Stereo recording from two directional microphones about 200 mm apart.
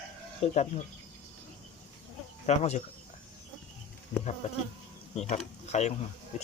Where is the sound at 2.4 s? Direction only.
35° left (ahead or behind).